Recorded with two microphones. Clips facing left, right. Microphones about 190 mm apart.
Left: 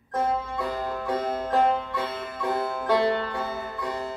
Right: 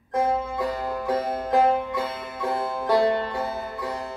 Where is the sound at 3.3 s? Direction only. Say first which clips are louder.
Right 2 dB; 30° right (ahead or behind).